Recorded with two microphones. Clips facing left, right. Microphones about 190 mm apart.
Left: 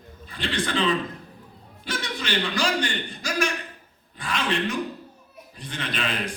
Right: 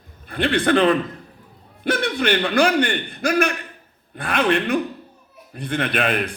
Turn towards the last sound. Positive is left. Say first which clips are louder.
# right 7 dB
turn(degrees=-60)  # may be behind; listen again after turning